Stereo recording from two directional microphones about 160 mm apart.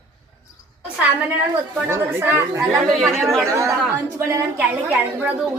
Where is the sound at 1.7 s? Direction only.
15° right (ahead or behind).